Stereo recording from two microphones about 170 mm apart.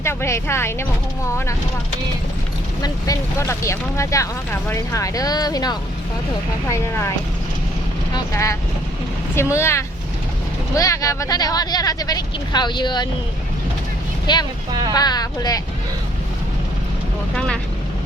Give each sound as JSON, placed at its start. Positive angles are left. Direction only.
{"t": 0.0, "sound": "speech", "side_deg": 15}
{"t": 2.8, "sound": "speech", "side_deg": 20}
{"t": 8.1, "sound": "speech", "side_deg": 20}
{"t": 14.3, "sound": "speech", "side_deg": 25}
{"t": 14.7, "sound": "speech", "side_deg": -25}
{"t": 14.9, "sound": "speech", "side_deg": 25}
{"t": 17.3, "sound": "speech", "side_deg": 5}